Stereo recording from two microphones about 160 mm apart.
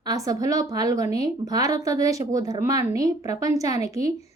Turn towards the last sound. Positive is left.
turn(degrees=-20)  # may be behind; listen again after turning